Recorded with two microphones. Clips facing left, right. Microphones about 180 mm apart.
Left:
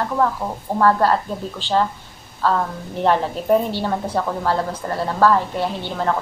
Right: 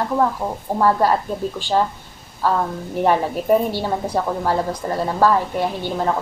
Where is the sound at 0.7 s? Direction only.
15° right (ahead or behind).